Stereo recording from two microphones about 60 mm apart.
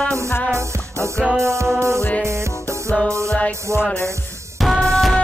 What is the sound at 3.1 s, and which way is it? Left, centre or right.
Music, right.